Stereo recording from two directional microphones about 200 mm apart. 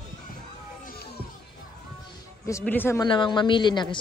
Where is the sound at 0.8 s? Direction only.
50° left (ahead or behind).